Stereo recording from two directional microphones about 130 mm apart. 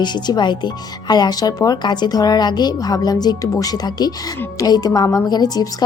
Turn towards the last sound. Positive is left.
turn(degrees=30)  # may be behind; listen again after turning